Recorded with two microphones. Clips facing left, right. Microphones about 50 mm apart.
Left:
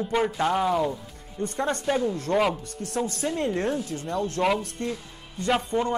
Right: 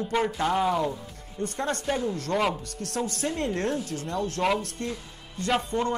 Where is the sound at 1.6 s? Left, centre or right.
Centre.